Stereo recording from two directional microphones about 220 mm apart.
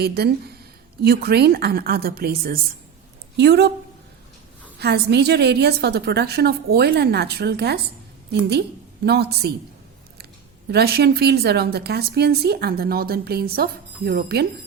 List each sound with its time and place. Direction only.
0.0 s a woman's voice: 45° right (ahead or behind)
4.8 s a woman's voice: 50° right (ahead or behind)
9.0 s a woman's voice: 45° right (ahead or behind)
10.7 s a woman's voice: 45° right (ahead or behind)